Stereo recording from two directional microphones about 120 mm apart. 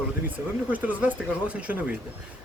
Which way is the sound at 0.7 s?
15° right (ahead or behind).